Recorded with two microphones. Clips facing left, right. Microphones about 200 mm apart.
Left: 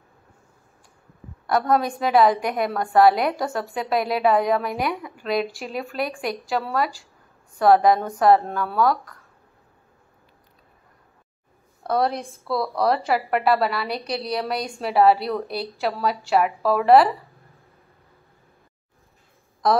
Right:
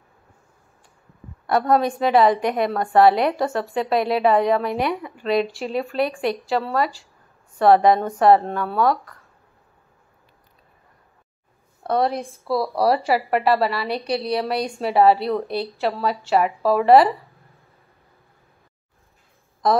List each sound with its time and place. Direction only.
1.5 s a woman's voice: centre (ahead or behind)
5.6 s speech: 35° right (ahead or behind)
6.5 s a woman's voice: 5° left (ahead or behind)
11.8 s a woman's voice: centre (ahead or behind)